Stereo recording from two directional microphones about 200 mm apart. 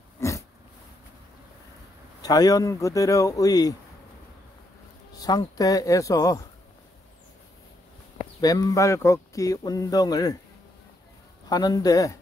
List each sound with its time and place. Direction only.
0.2 s a sound: 15° left (ahead or behind)
2.2 s speech: 20° left (ahead or behind)
5.2 s speech: 20° left (ahead or behind)
8.4 s speech: 20° left (ahead or behind)
11.4 s speech: 20° left (ahead or behind)